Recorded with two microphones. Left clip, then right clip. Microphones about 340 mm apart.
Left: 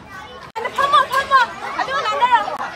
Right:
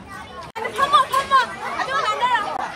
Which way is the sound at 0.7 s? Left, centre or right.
Left.